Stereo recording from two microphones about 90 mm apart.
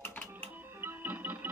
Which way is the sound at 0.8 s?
20° right (ahead or behind).